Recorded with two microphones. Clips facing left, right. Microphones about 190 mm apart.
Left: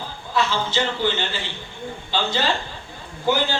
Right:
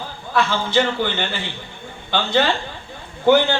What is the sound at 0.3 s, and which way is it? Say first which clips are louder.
A man's voice: right 4 dB; 55° right (ahead or behind).